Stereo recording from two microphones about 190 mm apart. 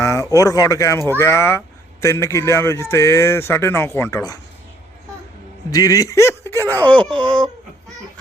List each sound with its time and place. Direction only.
0.0 s a sound: 15° left (ahead or behind)
0.3 s speech: 20° left (ahead or behind)
5.7 s speech: 20° left (ahead or behind)